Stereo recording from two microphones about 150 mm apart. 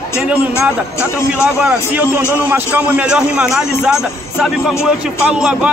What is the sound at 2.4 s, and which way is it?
A man's voice, 10° right (ahead or behind).